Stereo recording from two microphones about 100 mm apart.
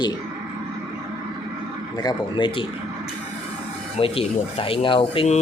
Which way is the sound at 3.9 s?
70° left (ahead or behind).